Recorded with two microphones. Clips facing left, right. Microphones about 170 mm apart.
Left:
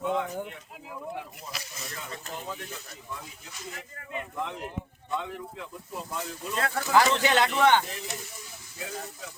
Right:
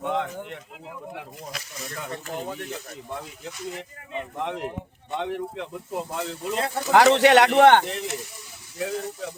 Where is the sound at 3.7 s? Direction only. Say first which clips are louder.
Right 4 dB; 25° right (ahead or behind).